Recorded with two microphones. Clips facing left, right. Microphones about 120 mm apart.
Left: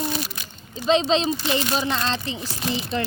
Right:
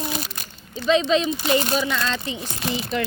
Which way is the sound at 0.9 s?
30° left (ahead or behind).